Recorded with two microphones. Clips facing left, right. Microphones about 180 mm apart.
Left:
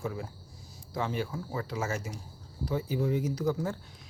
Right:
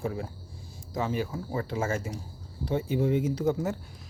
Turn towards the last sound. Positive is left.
turn(degrees=-25)  # may be behind; listen again after turning